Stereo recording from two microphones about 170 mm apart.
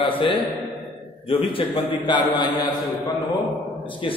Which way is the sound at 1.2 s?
35° left (ahead or behind).